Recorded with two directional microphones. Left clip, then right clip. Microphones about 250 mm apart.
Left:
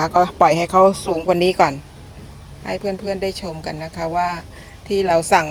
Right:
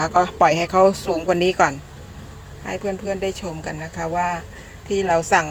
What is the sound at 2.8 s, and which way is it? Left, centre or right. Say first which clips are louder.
Speech: left 1 dB; centre.